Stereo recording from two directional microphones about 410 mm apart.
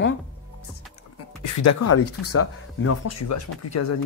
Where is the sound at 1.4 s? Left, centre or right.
Left.